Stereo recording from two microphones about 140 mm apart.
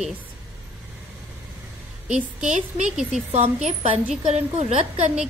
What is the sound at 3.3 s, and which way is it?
A woman's voice, 45° right (ahead or behind).